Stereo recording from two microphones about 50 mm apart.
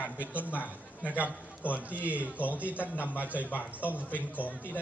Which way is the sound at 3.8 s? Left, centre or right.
Left.